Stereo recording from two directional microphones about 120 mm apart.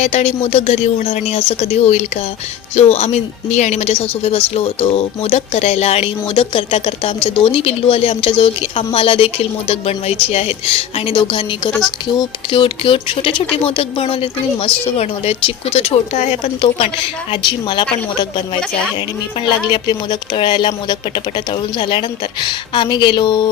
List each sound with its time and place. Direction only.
0.0 s speech: 65° left (ahead or behind)
11.1 s speech: 45° left (ahead or behind)
16.1 s speech: 85° left
16.6 s speech: 50° left (ahead or behind)
19.6 s a woman's voice: 40° left (ahead or behind)